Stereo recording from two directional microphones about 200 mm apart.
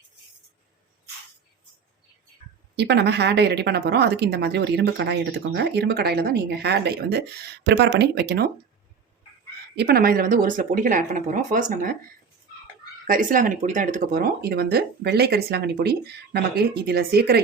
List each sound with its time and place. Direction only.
2.7 s speech: 55° right (ahead or behind)
9.7 s speech: 50° right (ahead or behind)
13.1 s speech: 40° right (ahead or behind)